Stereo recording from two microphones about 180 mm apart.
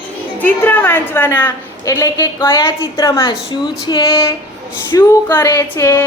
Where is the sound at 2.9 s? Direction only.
25° left (ahead or behind).